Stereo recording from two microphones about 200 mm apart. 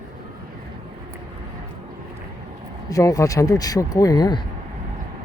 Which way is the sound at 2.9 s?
15° left (ahead or behind).